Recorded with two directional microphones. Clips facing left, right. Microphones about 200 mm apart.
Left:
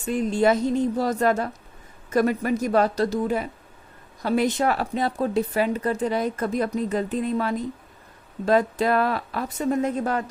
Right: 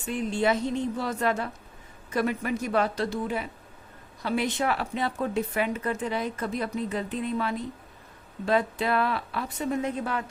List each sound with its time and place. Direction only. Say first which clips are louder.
0.0 s speech: left 5 dB; 40° left (ahead or behind)